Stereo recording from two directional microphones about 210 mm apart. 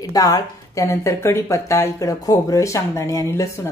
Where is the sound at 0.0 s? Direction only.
15° left (ahead or behind).